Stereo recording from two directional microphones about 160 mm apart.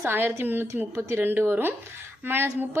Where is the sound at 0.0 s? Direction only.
15° right (ahead or behind).